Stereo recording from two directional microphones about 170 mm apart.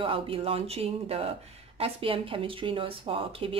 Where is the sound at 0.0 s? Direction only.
30° right (ahead or behind).